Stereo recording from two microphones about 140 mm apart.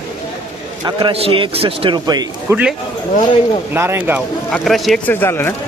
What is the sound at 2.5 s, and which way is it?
Speech, 10° right (ahead or behind).